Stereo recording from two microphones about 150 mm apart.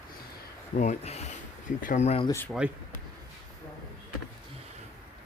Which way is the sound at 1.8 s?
65° left (ahead or behind).